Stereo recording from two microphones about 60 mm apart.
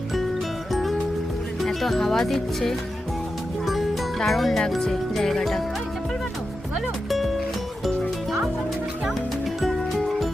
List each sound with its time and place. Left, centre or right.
0.7 s music: centre
1.6 s speech: centre
4.2 s speech: centre
7.1 s music: centre
9.6 s music: centre